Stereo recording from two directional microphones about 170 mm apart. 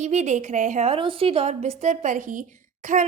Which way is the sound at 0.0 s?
40° right (ahead or behind).